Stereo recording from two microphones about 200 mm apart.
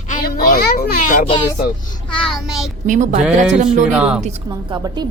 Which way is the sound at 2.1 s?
5° left (ahead or behind).